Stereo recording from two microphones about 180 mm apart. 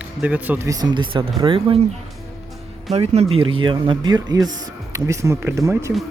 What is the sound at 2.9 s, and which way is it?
Speech, 35° right (ahead or behind).